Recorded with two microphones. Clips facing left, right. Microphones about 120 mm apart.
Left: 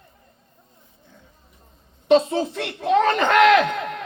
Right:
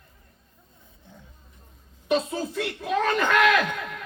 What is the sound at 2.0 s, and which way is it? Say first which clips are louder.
Speech: left 8 dB; 70° left (ahead or behind).